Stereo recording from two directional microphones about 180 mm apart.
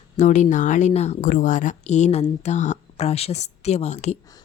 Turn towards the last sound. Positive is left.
turn(degrees=40)  # may be behind; listen again after turning